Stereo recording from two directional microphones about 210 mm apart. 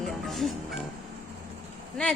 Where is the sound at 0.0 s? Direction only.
Centre (ahead or behind).